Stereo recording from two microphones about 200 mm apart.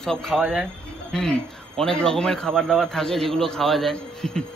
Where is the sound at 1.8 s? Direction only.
5° left (ahead or behind).